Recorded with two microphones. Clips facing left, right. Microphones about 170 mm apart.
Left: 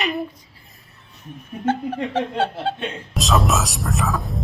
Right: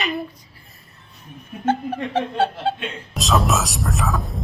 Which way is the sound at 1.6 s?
20° right (ahead or behind).